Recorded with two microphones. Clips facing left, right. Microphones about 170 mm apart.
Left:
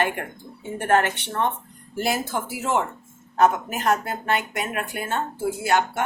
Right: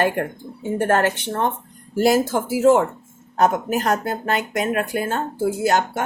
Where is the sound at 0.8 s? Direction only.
40° right (ahead or behind).